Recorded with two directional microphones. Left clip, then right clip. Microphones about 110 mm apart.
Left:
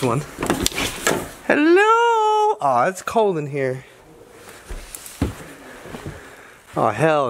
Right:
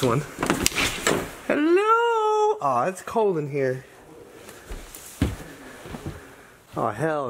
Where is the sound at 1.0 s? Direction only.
40° left (ahead or behind).